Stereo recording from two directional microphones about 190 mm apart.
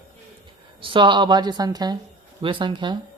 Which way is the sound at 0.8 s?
25° right (ahead or behind).